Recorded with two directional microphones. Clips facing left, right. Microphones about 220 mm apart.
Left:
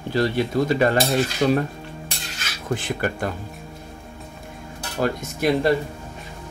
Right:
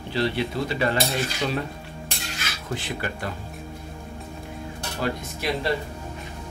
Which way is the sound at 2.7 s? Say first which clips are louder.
Left 6 dB; 50° left (ahead or behind).